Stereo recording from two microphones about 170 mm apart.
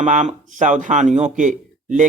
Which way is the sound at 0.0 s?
45° right (ahead or behind).